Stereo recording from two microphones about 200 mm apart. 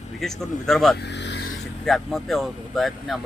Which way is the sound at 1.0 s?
60° left (ahead or behind).